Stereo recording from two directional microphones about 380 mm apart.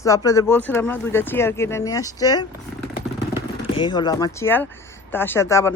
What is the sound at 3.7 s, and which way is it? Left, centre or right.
Speech, centre.